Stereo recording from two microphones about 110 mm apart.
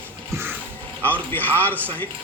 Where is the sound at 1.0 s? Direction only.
15° left (ahead or behind).